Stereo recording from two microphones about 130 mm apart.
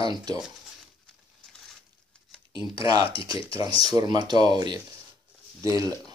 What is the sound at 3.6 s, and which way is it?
Speech, 30° right (ahead or behind).